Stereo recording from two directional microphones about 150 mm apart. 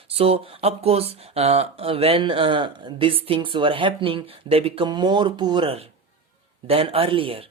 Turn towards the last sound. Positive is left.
turn(degrees=-40)  # may be behind; listen again after turning